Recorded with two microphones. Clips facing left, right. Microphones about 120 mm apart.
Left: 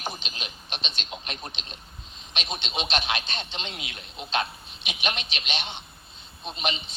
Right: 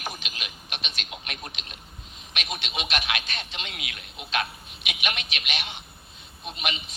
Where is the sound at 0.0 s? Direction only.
25° left (ahead or behind).